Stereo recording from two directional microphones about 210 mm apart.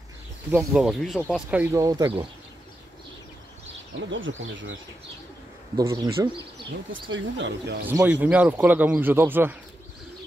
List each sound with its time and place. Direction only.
0.5 s speech: 5° right (ahead or behind)
1.5 s speech: 10° right (ahead or behind)
4.1 s speech: 65° right (ahead or behind)
5.8 s speech: 20° right (ahead or behind)
6.9 s speech: 65° right (ahead or behind)
7.8 s speech: 5° right (ahead or behind)